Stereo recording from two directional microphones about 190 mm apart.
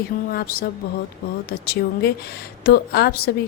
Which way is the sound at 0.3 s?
55° left (ahead or behind).